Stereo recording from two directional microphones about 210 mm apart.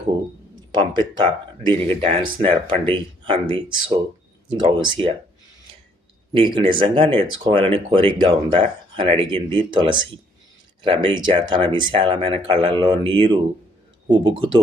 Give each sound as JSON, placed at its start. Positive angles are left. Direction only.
{"t": 0.7, "sound": "speech", "side_deg": -20}
{"t": 6.3, "sound": "speech", "side_deg": -25}